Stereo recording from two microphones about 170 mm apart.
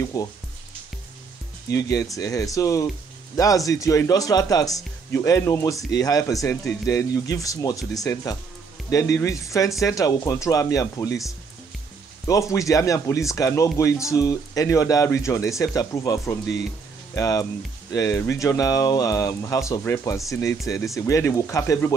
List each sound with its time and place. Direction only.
0.0 s speech: 20° left (ahead or behind)
1.7 s speech: 20° left (ahead or behind)
12.3 s speech: 20° left (ahead or behind)